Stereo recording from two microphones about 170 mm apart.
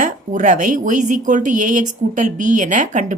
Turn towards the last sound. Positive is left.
turn(degrees=-45)  # may be behind; listen again after turning